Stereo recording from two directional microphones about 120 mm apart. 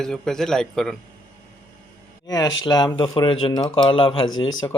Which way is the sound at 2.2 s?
35° left (ahead or behind).